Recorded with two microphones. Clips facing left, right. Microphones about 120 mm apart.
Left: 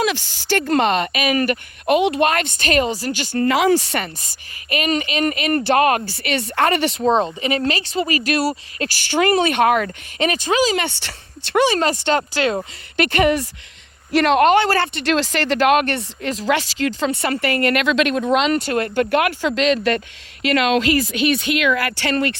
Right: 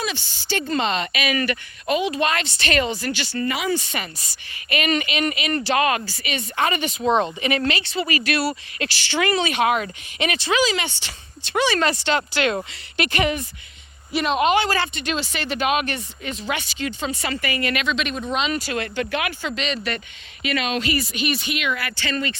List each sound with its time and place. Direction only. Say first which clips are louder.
0.0 s speech: left 8 dB; 90° left; by 2.0 s 45° left (ahead or behind)
2.0 s speech: left 5 dB; 60° left (ahead or behind)
3.5 s speech: left 10 dB; 90° left
3.9 s speech: left 6 dB; 50° left (ahead or behind)
4.8 s speech: left 3 dB; 35° left (ahead or behind); by 7.0 s 65° left (ahead or behind)
7.0 s speech: even; 30° left (ahead or behind); by 9.9 s 55° left (ahead or behind)
10.2 s speech: left 3 dB; 40° left (ahead or behind)
10.8 s speech: left 5 dB; 60° left (ahead or behind)
11.6 s speech: left 2 dB; 40° left (ahead or behind)
13.0 s speech: left 6 dB; 50° left (ahead or behind)
14.1 s speech: left 6 dB; 85° left
16.5 s speech: left 8 dB; 90° left; by 17.8 s 55° left (ahead or behind)
18.1 s speech: left 7 dB; 65° left (ahead or behind); by 19.0 s 50° left (ahead or behind)
19.1 s speech: left 8 dB; 65° left (ahead or behind)